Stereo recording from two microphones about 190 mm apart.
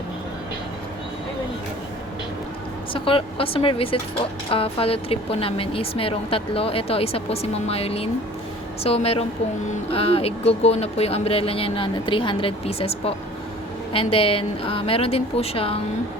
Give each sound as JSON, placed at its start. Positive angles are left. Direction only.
{"t": 2.9, "sound": "a woman's voice", "side_deg": 30}